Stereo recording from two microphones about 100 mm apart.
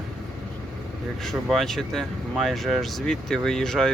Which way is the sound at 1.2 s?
Centre (ahead or behind).